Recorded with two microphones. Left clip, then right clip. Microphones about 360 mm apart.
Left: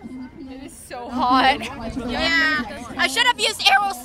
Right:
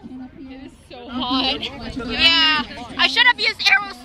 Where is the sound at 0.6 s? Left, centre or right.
Left.